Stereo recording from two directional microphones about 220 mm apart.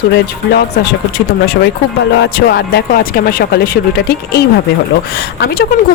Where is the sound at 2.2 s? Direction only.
45° left (ahead or behind).